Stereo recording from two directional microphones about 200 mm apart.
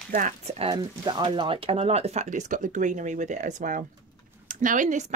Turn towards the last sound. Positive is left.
turn(degrees=-40)  # may be behind; listen again after turning